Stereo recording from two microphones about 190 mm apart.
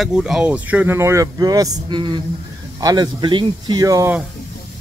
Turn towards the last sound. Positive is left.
turn(degrees=-20)  # may be behind; listen again after turning